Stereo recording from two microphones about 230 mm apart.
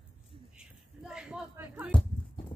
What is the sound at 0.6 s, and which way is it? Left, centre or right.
Speech, centre.